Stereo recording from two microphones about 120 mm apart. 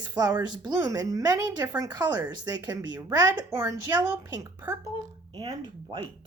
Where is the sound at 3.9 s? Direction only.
10° right (ahead or behind).